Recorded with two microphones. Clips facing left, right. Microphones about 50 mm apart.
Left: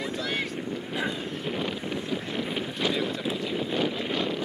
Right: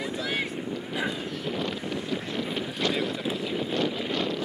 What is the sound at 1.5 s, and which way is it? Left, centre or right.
Wind noise, centre.